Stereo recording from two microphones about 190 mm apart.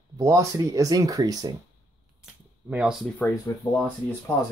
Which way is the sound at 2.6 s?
5° right (ahead or behind).